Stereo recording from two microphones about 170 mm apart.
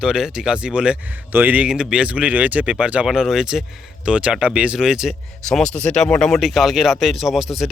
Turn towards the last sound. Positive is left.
turn(degrees=0)  # may be behind; listen again after turning